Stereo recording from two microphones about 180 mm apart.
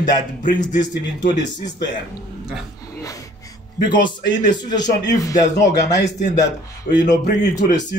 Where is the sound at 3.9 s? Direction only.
25° left (ahead or behind).